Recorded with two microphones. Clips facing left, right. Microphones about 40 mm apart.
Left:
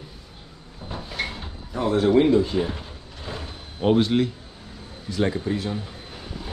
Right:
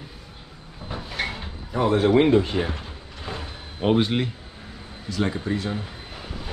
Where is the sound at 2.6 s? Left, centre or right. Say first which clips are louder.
Even; centre.